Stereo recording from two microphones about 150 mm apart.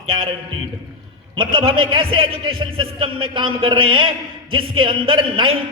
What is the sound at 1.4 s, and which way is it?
A man's voice, 35° right (ahead or behind).